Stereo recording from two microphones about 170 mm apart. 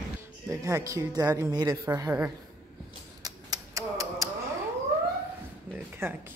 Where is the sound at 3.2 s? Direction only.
20° right (ahead or behind).